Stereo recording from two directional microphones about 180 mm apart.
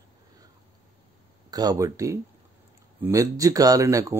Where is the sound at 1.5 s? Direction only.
20° right (ahead or behind).